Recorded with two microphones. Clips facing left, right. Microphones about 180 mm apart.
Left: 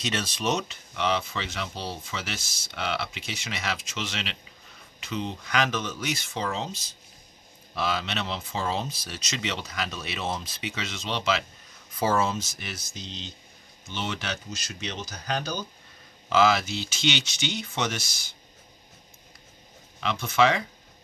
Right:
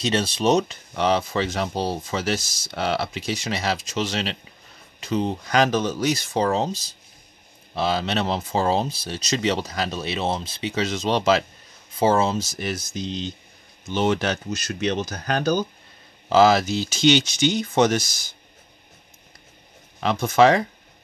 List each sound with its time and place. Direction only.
0.0 s speech: 30° right (ahead or behind)
11.9 s speech: 25° right (ahead or behind); by 15.6 s 55° right (ahead or behind)
16.3 s speech: 40° right (ahead or behind)
20.0 s speech: 45° right (ahead or behind)